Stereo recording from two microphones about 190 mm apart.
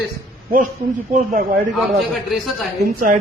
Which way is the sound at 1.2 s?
50° right (ahead or behind).